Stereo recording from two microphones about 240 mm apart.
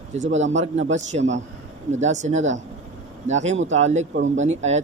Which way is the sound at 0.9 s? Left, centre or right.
Right.